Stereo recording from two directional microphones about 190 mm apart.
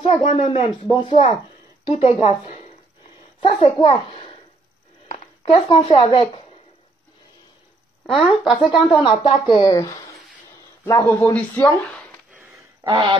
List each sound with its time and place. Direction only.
0.0 s a child's voice: 35° left (ahead or behind)
8.1 s a woman's voice: centre (ahead or behind)
9.0 s speech: 25° left (ahead or behind); by 12.2 s centre (ahead or behind)
12.3 s a sound: 10° right (ahead or behind)
12.8 s speech: 25° right (ahead or behind)